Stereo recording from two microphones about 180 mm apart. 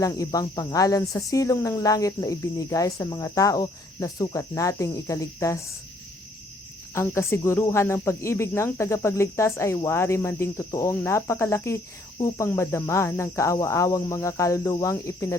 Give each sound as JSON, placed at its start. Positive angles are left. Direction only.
{"t": 0.0, "sound": "speech", "side_deg": 20}
{"t": 6.9, "sound": "speech", "side_deg": 15}